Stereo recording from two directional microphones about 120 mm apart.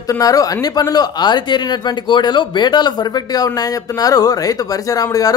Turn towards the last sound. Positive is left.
turn(degrees=30)  # may be behind; listen again after turning